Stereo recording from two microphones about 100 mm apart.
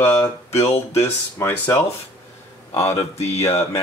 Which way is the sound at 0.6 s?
75° left (ahead or behind).